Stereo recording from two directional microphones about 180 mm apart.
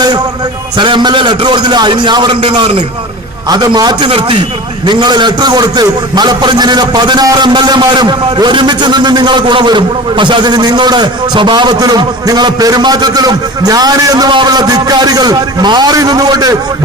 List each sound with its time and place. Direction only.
0.8 s a man's voice: 25° right (ahead or behind)